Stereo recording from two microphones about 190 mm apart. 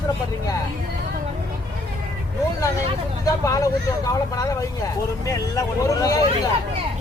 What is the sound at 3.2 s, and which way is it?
Speech, 15° left (ahead or behind).